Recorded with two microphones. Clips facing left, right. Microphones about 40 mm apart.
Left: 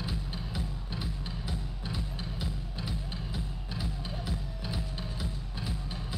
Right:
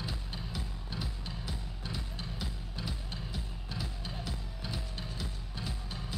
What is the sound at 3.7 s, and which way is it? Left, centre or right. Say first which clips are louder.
Music: left 2 dB; centre.